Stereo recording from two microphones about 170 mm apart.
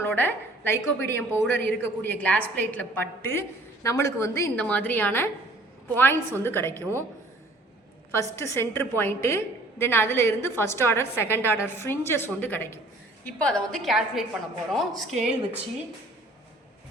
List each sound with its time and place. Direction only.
0.0 s a woman's voice: 10° left (ahead or behind)
8.1 s a woman's voice: 15° left (ahead or behind); by 15.6 s 5° right (ahead or behind)